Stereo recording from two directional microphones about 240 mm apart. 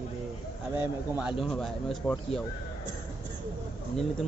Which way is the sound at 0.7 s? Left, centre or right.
Centre.